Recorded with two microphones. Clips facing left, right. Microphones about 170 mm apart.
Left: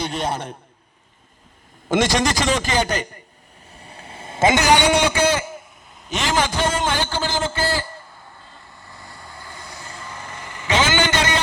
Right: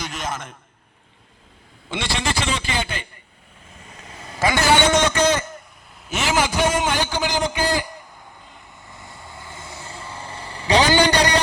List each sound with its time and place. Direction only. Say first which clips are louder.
0.0 s a man's voice: left 5 dB; 30° left (ahead or behind)
1.9 s a man's voice: left 7 dB; 45° left (ahead or behind)
3.8 s a sound: left 2 dB; 35° left (ahead or behind); by 5.6 s 10° left (ahead or behind)
6.1 s a man's voice: even; 5° right (ahead or behind)
8.4 s vehicle: even; 20° right (ahead or behind); by 11.4 s 35° right (ahead or behind)